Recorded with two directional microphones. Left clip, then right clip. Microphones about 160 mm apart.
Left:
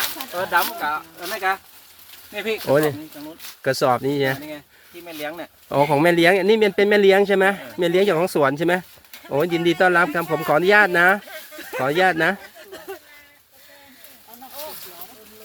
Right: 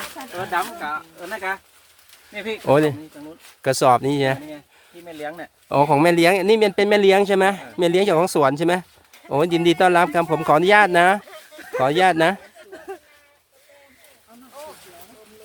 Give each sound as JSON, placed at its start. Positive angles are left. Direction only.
{"t": 0.3, "sound": "speech", "side_deg": -5}
{"t": 2.6, "sound": "speech", "side_deg": -50}
{"t": 5.0, "sound": "speech", "side_deg": -5}
{"t": 5.6, "sound": "speech", "side_deg": -30}
{"t": 9.3, "sound": "speech", "side_deg": -35}
{"t": 11.5, "sound": "a sound", "side_deg": -10}
{"t": 11.8, "sound": "speech", "side_deg": -30}